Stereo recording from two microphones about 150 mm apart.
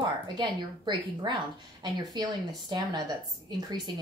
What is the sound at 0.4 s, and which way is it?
Speech, 30° right (ahead or behind).